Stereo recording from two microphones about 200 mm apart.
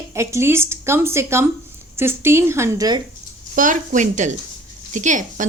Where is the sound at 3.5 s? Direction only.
40° right (ahead or behind).